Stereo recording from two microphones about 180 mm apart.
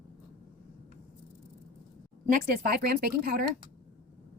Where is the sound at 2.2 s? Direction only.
55° right (ahead or behind).